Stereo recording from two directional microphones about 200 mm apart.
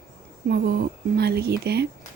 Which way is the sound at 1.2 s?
55° right (ahead or behind).